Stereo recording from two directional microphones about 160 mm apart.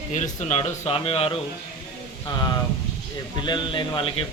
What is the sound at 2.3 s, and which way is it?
Speech, 25° left (ahead or behind).